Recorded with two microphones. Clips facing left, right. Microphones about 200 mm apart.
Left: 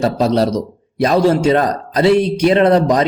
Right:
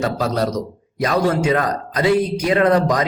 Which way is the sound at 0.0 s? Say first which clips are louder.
Left 5 dB; 30° left (ahead or behind).